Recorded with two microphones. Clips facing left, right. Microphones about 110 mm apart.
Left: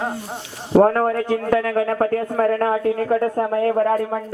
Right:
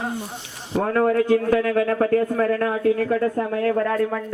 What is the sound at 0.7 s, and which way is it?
A man's voice, 40° left (ahead or behind).